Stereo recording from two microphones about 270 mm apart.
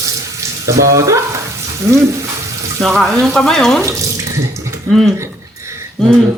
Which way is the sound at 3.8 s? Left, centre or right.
Centre.